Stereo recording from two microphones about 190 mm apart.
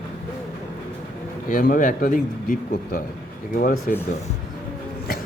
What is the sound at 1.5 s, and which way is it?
Speech, 45° left (ahead or behind).